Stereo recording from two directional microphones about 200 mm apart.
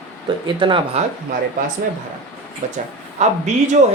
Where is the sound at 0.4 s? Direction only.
25° right (ahead or behind).